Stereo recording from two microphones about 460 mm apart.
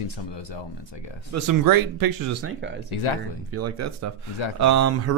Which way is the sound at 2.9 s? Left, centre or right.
Left.